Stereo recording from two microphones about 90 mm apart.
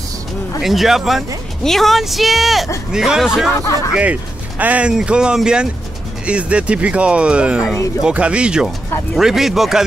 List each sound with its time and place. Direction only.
0.6 s speech: 5° right (ahead or behind)
3.5 s speech: 35° left (ahead or behind)
3.9 s speech: 15° right (ahead or behind)